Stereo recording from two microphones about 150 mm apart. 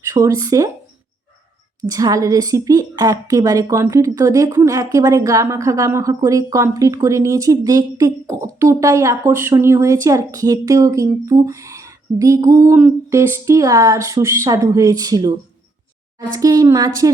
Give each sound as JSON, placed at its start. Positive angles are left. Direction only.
{"t": 0.0, "sound": "a woman's voice", "side_deg": -25}
{"t": 1.8, "sound": "a woman's voice", "side_deg": -25}